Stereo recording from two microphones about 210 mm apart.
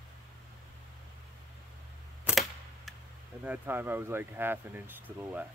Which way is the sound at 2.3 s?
Centre (ahead or behind).